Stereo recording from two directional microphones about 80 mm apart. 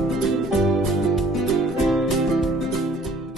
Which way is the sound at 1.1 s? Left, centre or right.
Centre.